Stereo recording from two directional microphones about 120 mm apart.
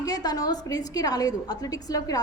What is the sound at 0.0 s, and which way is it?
A woman's voice, 30° left (ahead or behind).